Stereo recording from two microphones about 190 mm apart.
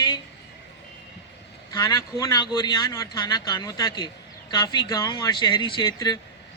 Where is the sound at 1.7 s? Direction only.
20° left (ahead or behind).